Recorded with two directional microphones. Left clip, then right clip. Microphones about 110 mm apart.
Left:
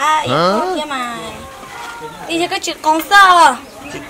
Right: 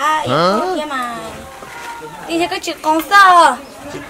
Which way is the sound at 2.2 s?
Centre (ahead or behind).